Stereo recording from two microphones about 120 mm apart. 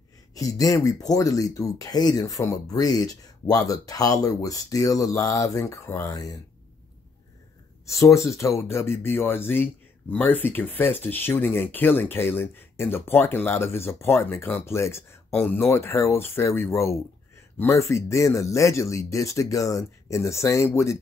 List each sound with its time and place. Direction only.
0.3 s speech: 30° left (ahead or behind)
7.8 s speech: 25° left (ahead or behind)